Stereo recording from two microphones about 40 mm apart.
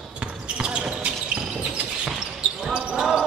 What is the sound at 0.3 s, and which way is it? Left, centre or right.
Basketball bounce, right.